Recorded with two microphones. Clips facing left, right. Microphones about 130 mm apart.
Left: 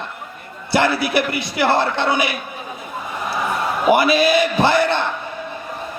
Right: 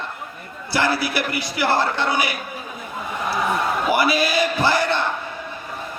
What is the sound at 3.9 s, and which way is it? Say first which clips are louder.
A man's voice: left 6 dB; 25° left (ahead or behind).